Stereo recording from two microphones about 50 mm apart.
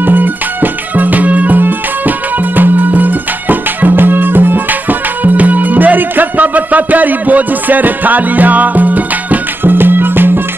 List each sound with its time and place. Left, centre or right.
0.0 s music: right